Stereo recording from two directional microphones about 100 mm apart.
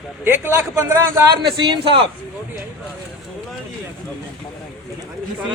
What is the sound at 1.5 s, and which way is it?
Speech, 55° right (ahead or behind).